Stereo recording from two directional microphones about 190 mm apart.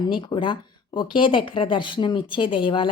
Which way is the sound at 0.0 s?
25° left (ahead or behind).